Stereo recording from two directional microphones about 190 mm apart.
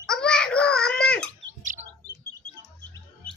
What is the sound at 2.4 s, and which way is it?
Chirp, 5° left (ahead or behind).